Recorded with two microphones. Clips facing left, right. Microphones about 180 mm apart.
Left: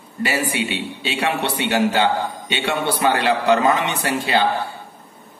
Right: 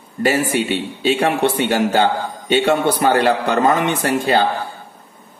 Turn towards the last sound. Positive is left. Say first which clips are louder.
# right 3 dB
turn(degrees=-45)  # may be behind; listen again after turning